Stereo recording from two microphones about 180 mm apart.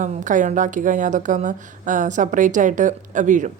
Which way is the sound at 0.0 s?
45° right (ahead or behind).